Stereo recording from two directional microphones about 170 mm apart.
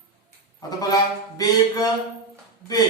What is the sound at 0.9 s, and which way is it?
A man's voice, 20° left (ahead or behind).